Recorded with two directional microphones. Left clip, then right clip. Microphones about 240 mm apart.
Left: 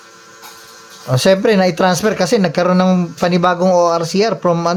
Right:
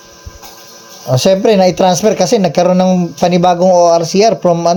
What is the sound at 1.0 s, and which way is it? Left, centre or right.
Speech, centre.